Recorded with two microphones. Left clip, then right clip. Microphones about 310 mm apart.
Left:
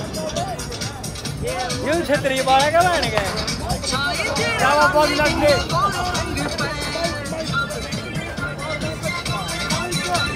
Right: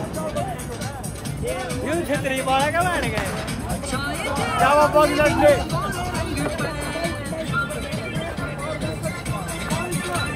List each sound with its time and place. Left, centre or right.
1.9 s speech: left
4.6 s speech: centre
5.7 s music: centre
9.7 s music: centre